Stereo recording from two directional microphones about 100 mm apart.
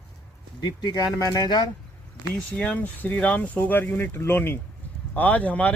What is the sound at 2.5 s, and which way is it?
Speech, 10° left (ahead or behind).